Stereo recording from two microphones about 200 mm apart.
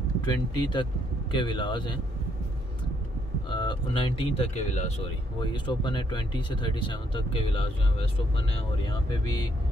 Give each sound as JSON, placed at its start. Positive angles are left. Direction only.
{"t": 0.2, "sound": "speech", "side_deg": 20}
{"t": 3.4, "sound": "speech", "side_deg": 25}